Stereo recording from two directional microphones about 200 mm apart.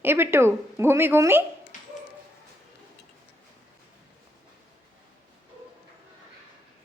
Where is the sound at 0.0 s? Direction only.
10° right (ahead or behind).